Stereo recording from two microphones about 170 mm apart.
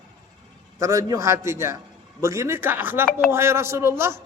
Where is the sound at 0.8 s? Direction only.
20° right (ahead or behind).